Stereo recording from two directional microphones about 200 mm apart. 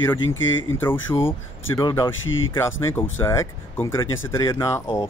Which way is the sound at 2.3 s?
80° left.